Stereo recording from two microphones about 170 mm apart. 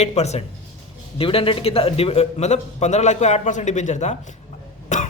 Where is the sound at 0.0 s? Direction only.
40° left (ahead or behind).